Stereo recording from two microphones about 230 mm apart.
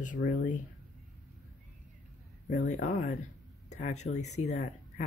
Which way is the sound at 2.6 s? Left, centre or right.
Left.